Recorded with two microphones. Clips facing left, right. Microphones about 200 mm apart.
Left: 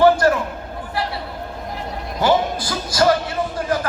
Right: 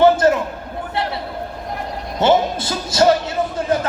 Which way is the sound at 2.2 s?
25° right (ahead or behind).